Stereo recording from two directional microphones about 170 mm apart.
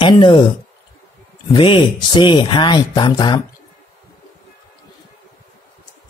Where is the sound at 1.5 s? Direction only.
30° left (ahead or behind).